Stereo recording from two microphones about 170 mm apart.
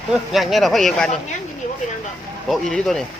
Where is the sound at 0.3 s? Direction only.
Centre (ahead or behind).